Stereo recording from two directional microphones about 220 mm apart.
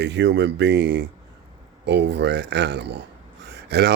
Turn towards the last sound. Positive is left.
turn(degrees=-50)  # may be behind; listen again after turning